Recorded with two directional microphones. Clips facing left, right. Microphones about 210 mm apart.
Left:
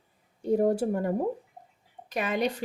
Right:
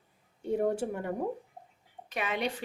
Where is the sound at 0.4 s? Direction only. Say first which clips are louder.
Left 5 dB; 35° left (ahead or behind).